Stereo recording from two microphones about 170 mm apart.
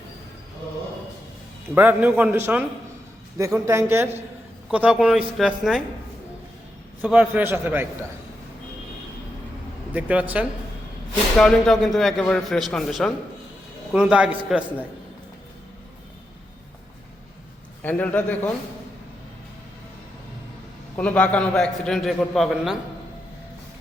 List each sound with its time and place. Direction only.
1.7 s a man's voice: 10° right (ahead or behind)
7.0 s a man's voice: 10° right (ahead or behind)
9.9 s a man's voice: 10° right (ahead or behind)
11.3 s a man's voice: 5° left (ahead or behind)
17.8 s a man's voice: 10° left (ahead or behind)
20.9 s a man's voice: 10° left (ahead or behind)